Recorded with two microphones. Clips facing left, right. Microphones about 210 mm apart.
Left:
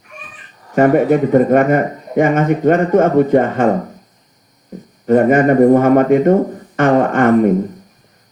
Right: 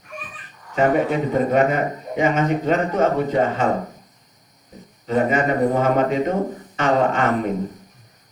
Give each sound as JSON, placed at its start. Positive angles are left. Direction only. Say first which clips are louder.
{"t": 0.8, "sound": "a man's voice", "louder": "left 7 dB", "side_deg": 55}
{"t": 5.0, "sound": "a man's voice", "louder": "left 8 dB", "side_deg": 55}